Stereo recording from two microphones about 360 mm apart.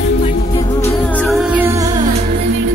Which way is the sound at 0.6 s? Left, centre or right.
Centre.